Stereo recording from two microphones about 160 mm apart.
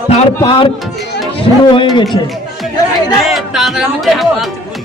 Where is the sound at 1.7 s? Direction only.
30° left (ahead or behind).